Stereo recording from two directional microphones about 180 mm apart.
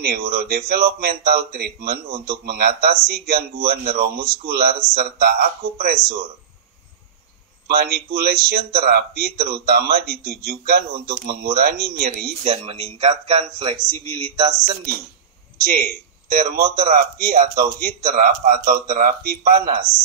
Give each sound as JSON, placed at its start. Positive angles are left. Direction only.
{"t": 0.0, "sound": "speech", "side_deg": -60}
{"t": 7.6, "sound": "speech", "side_deg": -60}
{"t": 12.4, "sound": "speech", "side_deg": -40}
{"t": 15.6, "sound": "a man's voice", "side_deg": -55}